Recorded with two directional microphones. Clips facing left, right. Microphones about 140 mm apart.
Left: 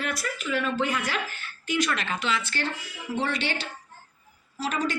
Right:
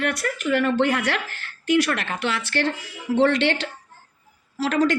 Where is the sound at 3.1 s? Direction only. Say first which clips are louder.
Right 10 dB; 90° right.